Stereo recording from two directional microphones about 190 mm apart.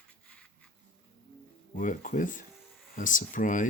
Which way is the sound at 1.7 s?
45° left (ahead or behind).